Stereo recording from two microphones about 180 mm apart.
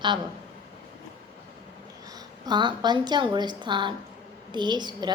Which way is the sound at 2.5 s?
25° right (ahead or behind).